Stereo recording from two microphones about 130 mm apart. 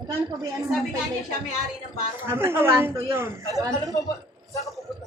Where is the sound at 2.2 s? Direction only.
20° right (ahead or behind).